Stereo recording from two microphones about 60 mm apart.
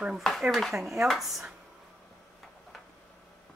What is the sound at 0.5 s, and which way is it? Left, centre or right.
Speech, centre.